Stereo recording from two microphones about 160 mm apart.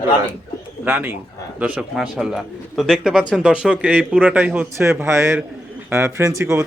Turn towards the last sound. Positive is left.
turn(degrees=-15)  # may be behind; listen again after turning